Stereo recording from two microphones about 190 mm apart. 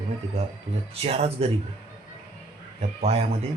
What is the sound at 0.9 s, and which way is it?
Speech, 30° right (ahead or behind).